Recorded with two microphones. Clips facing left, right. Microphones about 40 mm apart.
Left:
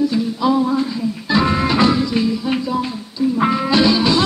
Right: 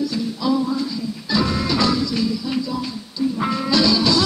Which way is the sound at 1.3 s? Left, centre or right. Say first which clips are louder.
Left 4 dB; left.